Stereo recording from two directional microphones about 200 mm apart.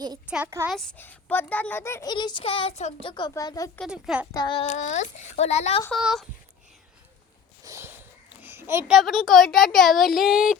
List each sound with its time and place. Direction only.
0.3 s a child's voice: 5° right (ahead or behind)
0.7 s a child's voice: 5° left (ahead or behind)
3.8 s speech: centre (ahead or behind)
4.3 s child singing: 20° left (ahead or behind)
4.6 s speech: 35° left (ahead or behind)
5.9 s speech: centre (ahead or behind)
7.6 s a sound: 15° right (ahead or behind)
9.0 s speech: centre (ahead or behind)